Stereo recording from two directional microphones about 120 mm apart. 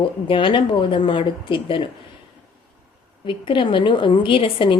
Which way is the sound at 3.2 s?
45° left (ahead or behind).